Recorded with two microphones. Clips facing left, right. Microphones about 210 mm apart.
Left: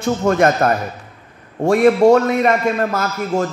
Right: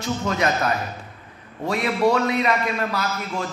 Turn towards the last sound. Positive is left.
turn(degrees=45)  # may be behind; listen again after turning